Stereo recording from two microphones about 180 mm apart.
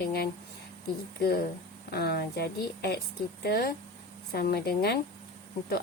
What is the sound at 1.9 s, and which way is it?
A woman's voice, 60° left (ahead or behind).